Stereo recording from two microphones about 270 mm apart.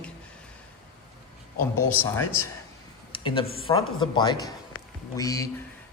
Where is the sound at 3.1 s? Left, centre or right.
Centre.